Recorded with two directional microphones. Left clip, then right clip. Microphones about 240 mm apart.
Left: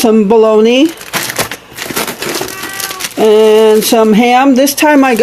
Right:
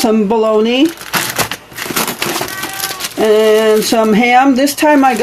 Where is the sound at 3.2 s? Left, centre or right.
Left.